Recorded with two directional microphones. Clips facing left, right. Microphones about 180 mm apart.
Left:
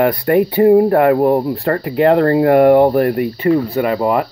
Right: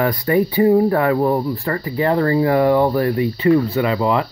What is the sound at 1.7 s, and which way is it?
Speech, 65° left (ahead or behind).